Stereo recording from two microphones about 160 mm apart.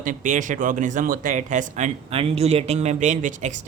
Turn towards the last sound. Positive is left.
turn(degrees=-50)  # may be behind; listen again after turning